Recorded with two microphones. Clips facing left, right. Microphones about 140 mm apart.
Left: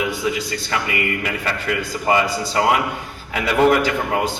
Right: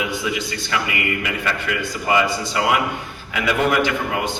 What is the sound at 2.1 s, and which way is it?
Speech, 35° left (ahead or behind).